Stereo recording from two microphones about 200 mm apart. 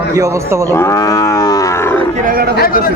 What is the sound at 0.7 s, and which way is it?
Livestock, 15° left (ahead or behind).